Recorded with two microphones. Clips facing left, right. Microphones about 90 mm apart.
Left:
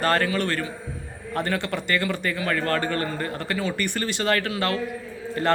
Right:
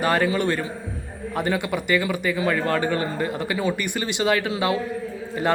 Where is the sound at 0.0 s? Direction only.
10° right (ahead or behind).